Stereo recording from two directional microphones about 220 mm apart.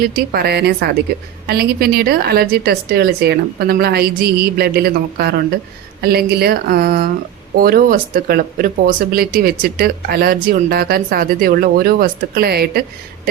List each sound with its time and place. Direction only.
0.0 s a woman's voice: 45° right (ahead or behind)